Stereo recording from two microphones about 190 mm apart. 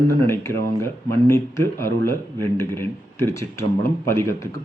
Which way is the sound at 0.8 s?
15° left (ahead or behind).